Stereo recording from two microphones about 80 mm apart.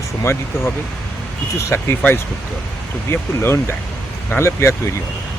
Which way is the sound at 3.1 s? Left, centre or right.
Left.